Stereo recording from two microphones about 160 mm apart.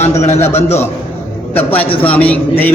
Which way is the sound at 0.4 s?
40° left (ahead or behind).